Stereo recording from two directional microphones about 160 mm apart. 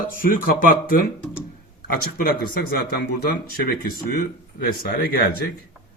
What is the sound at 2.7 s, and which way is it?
Speech, 70° left (ahead or behind).